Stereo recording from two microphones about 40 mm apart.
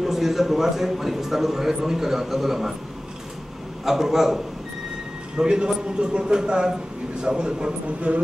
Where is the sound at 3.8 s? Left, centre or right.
Centre.